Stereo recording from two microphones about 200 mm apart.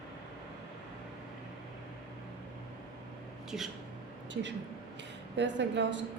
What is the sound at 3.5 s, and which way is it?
Speech, centre (ahead or behind).